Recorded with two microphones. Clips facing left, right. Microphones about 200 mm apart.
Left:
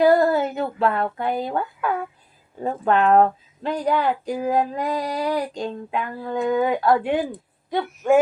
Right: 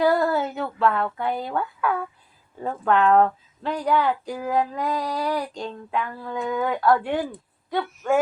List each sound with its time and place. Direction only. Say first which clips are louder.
0.0 s speech: left 4 dB; 15° left (ahead or behind)